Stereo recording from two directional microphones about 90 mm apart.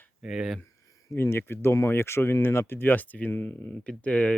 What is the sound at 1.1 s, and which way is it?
Speech, 30° left (ahead or behind).